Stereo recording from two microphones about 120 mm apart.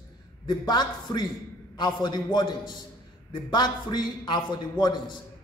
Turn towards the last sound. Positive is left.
turn(degrees=40)  # may be behind; listen again after turning